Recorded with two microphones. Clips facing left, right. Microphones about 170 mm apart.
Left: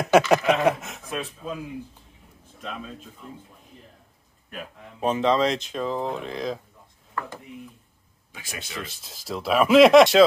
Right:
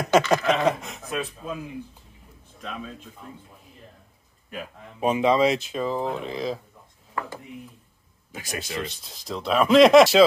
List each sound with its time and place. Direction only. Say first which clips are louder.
0.1 s speech: left 2 dB; 10° left (ahead or behind)
4.5 s speech: right 2 dB; 10° right (ahead or behind)
8.3 s speech: right 6 dB; 40° right (ahead or behind)
8.7 s speech: right 5 dB; centre (ahead or behind)